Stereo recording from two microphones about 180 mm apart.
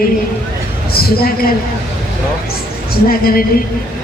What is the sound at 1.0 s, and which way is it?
Speech, 55° left (ahead or behind).